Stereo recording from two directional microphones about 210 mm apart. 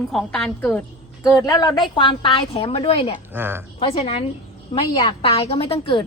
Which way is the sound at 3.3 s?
10° right (ahead or behind).